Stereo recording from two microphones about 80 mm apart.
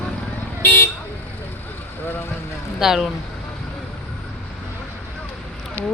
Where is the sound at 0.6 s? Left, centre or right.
Left.